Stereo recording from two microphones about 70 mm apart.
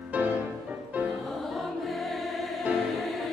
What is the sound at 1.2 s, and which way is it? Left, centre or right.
Music, centre.